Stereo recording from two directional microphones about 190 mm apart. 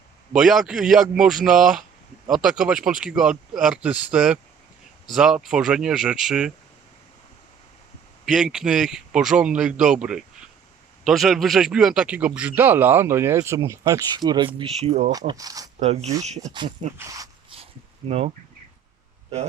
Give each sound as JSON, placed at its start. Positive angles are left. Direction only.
{"t": 0.3, "sound": "a man's voice", "side_deg": 0}
{"t": 8.2, "sound": "a man's voice", "side_deg": -5}
{"t": 15.3, "sound": "speech", "side_deg": -20}
{"t": 15.8, "sound": "speech", "side_deg": -35}
{"t": 16.4, "sound": "a man's voice", "side_deg": -25}